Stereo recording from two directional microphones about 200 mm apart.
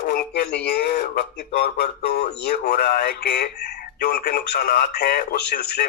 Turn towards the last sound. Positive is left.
turn(degrees=50)  # may be behind; listen again after turning